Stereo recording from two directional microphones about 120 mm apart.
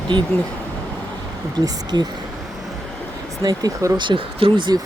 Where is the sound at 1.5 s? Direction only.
30° right (ahead or behind).